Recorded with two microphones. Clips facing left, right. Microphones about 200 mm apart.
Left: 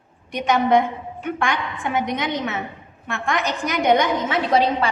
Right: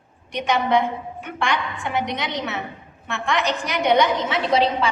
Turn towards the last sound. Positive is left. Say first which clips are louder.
# left 1 dB
turn(degrees=50)  # may be behind; listen again after turning